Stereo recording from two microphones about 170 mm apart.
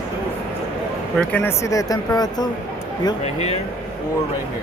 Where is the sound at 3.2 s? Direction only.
40° left (ahead or behind).